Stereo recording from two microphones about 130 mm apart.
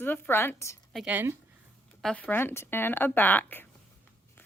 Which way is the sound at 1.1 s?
15° right (ahead or behind).